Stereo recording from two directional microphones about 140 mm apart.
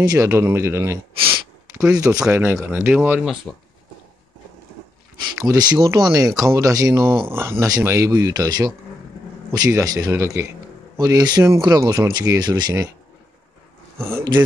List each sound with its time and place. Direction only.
0.0 s speech: 25° right (ahead or behind)
5.4 s speech: 30° right (ahead or behind)